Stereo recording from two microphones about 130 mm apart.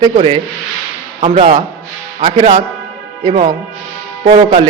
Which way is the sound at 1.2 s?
50° right (ahead or behind).